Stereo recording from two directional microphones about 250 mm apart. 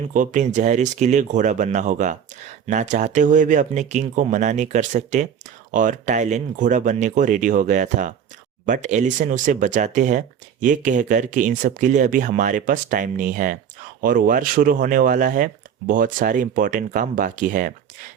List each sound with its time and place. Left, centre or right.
0.1 s speech: right